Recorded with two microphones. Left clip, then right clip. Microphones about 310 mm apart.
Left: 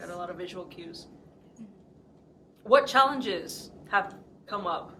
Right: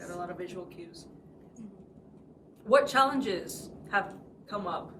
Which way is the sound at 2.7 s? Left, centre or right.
Centre.